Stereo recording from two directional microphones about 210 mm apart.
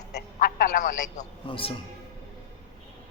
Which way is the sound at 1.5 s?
25° left (ahead or behind).